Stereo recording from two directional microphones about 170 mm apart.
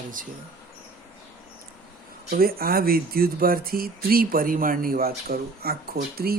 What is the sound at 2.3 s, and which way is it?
Speech, 60° right (ahead or behind).